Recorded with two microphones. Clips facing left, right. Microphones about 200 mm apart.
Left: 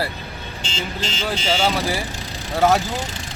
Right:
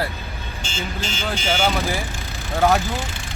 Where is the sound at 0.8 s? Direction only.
30° left (ahead or behind).